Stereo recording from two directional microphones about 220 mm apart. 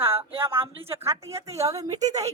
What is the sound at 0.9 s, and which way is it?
A woman's voice, 15° right (ahead or behind).